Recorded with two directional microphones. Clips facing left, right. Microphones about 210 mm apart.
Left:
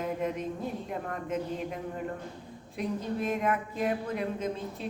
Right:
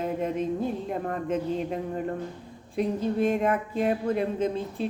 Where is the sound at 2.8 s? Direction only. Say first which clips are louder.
Right 7 dB; 30° right (ahead or behind).